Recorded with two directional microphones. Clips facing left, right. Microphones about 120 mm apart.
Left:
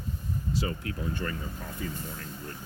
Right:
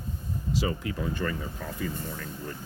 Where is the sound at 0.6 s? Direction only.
90° right.